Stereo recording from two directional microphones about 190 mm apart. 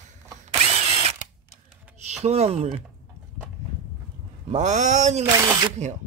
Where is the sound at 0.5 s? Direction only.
30° right (ahead or behind).